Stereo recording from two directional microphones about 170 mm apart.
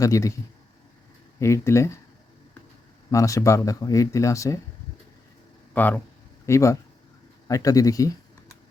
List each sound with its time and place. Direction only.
0.0 s speech: 20° left (ahead or behind)
1.4 s speech: 15° left (ahead or behind)
3.1 s speech: 20° left (ahead or behind)
5.7 s speech: 10° left (ahead or behind)